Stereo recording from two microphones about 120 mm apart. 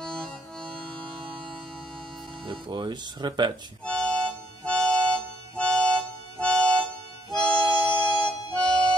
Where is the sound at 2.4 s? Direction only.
40° right (ahead or behind).